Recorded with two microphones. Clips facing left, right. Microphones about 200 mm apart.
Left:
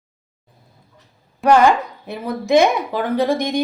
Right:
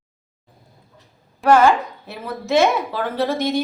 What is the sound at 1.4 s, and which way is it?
Speech, 15° left (ahead or behind).